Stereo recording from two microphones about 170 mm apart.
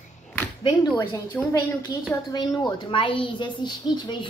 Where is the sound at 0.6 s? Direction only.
25° left (ahead or behind).